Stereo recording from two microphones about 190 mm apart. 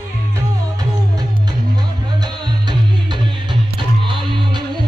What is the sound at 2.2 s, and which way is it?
Music, 25° right (ahead or behind).